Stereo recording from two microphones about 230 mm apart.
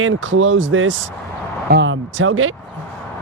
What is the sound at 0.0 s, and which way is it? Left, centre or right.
Speech, right.